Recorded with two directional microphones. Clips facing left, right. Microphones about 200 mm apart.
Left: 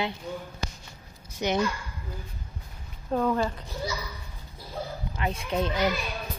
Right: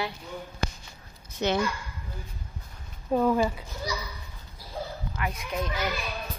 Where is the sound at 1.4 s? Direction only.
15° left (ahead or behind).